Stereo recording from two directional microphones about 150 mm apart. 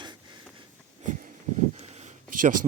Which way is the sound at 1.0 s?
55° right (ahead or behind).